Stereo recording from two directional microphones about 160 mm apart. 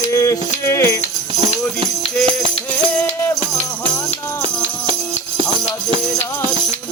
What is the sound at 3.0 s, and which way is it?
Music, 15° left (ahead or behind).